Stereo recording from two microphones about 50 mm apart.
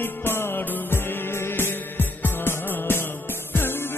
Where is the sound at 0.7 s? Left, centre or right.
Left.